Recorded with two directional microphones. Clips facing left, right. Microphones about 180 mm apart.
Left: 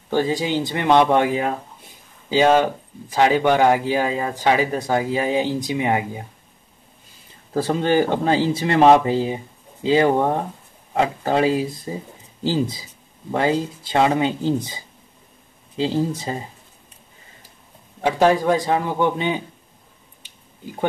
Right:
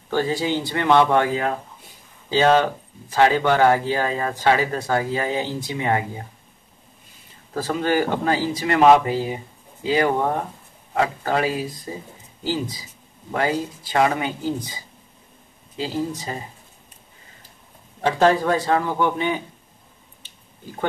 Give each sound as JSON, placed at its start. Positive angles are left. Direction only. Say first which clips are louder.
{"t": 0.1, "sound": "speech", "louder": "left 2 dB", "side_deg": 15}
{"t": 7.5, "sound": "speech", "louder": "left 3 dB", "side_deg": 30}
{"t": 15.8, "sound": "speech", "louder": "left 4 dB", "side_deg": 25}
{"t": 18.0, "sound": "speech", "louder": "left 1 dB", "side_deg": 15}